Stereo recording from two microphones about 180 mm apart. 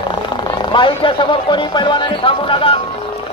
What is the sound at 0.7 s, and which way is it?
Speech, 25° left (ahead or behind).